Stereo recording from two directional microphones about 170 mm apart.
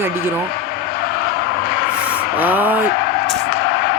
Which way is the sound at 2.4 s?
10° right (ahead or behind).